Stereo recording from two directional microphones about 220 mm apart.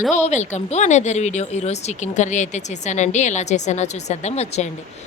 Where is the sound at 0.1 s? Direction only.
30° left (ahead or behind).